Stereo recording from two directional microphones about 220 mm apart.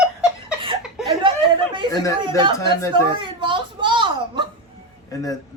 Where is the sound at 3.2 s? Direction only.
20° right (ahead or behind).